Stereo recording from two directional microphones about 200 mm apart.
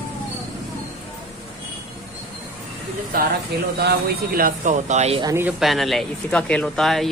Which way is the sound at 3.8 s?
50° right (ahead or behind).